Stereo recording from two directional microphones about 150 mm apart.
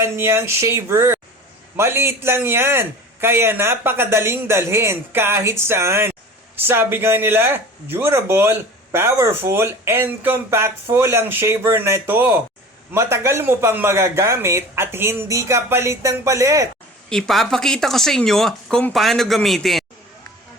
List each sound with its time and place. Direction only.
0.0 s speech: 15° right (ahead or behind)
17.1 s speech: centre (ahead or behind)